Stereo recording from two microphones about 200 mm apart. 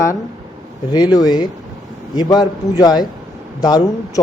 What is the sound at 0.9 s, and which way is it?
Speech, 20° left (ahead or behind).